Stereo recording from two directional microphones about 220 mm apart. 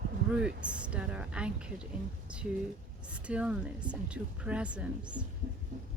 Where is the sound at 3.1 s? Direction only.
5° right (ahead or behind).